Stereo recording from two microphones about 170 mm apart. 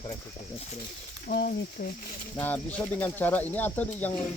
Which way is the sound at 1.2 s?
65° left (ahead or behind).